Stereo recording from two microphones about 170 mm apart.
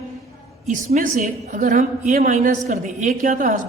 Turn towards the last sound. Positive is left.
turn(degrees=-50)  # may be behind; listen again after turning